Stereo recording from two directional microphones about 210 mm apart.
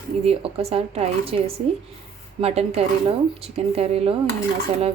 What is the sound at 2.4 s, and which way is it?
A woman's voice, 30° right (ahead or behind).